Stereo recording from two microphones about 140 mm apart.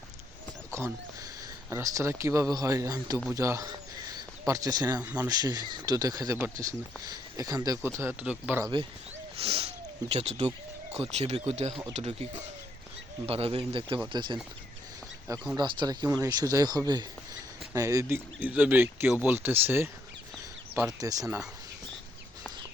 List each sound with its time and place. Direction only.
0.7 s a sound: 20° right (ahead or behind)
1.7 s speech: 20° right (ahead or behind)
4.9 s speech: 10° right (ahead or behind)
5.4 s speech: 30° right (ahead or behind)
7.8 s speech: 15° right (ahead or behind)
9.4 s speech: 45° right (ahead or behind)
13.2 s speech: 45° right (ahead or behind)
15.5 s speech: 30° right (ahead or behind)
18.3 s speech: 10° right (ahead or behind)